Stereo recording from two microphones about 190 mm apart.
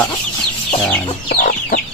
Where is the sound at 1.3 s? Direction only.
40° left (ahead or behind).